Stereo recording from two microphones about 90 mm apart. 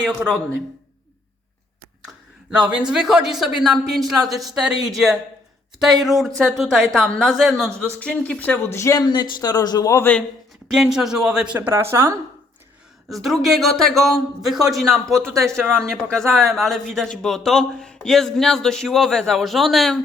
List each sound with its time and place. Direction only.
2.5 s a man's voice: 15° right (ahead or behind)
7.9 s speech: 15° left (ahead or behind)
8.6 s speech: 30° left (ahead or behind)
9.0 s a man's voice: 50° left (ahead or behind)
10.7 s speech: 5° right (ahead or behind)
11.7 s speech: 30° right (ahead or behind)
13.1 s a man's voice: centre (ahead or behind)